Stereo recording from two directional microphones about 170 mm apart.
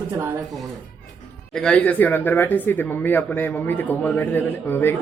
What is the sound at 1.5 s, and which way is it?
Speech, 5° left (ahead or behind).